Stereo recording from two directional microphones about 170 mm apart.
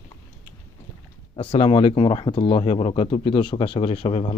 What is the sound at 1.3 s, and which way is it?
Speech, 35° left (ahead or behind).